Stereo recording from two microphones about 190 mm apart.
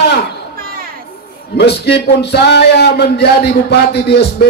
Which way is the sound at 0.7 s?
50° right (ahead or behind).